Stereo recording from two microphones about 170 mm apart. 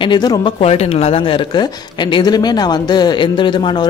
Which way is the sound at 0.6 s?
35° left (ahead or behind).